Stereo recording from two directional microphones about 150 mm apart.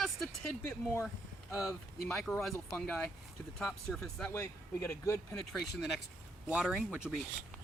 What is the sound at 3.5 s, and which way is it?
Speech, centre (ahead or behind).